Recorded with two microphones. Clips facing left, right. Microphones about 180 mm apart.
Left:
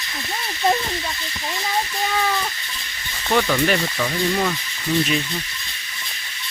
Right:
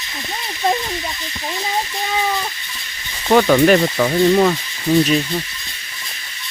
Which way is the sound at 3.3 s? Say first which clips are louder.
Right 8 dB; 50° right (ahead or behind).